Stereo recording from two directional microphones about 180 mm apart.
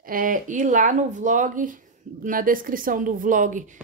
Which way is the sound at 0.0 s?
50° right (ahead or behind).